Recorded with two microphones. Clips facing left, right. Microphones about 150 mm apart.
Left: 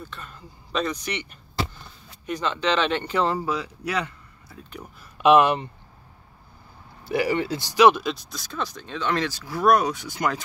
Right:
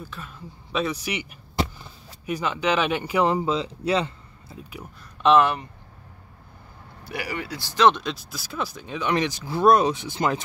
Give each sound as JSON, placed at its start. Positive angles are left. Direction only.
{"t": 0.0, "sound": "speech", "side_deg": -5}
{"t": 4.6, "sound": "speech", "side_deg": -5}
{"t": 5.2, "sound": "speech", "side_deg": 15}
{"t": 7.1, "sound": "speech", "side_deg": 30}
{"t": 7.6, "sound": "speech", "side_deg": 10}